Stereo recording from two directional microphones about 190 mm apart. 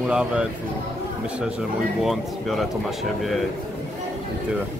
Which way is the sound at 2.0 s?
Centre (ahead or behind).